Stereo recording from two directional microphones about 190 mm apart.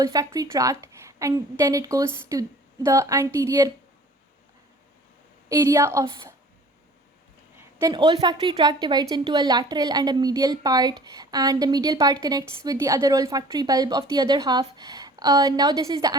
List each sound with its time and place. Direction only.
0.0 s a woman's voice: 20° right (ahead or behind)
5.5 s a woman's voice: 20° right (ahead or behind)
7.8 s a woman's voice: 20° right (ahead or behind)